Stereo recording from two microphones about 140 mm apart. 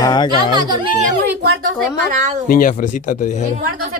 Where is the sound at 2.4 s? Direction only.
85° left; by 3.4 s 65° left (ahead or behind).